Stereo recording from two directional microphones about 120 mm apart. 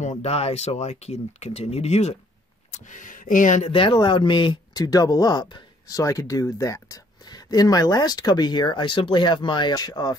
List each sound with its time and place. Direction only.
0.0 s speech: 65° left (ahead or behind)
2.7 s speech: 90° left
3.7 s speech: 45° left (ahead or behind)